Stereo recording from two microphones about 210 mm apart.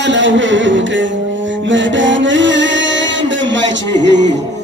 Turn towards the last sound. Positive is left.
turn(degrees=-55)  # may be behind; listen again after turning